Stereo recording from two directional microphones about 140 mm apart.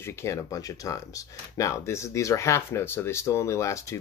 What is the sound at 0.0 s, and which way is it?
Speech, 20° left (ahead or behind).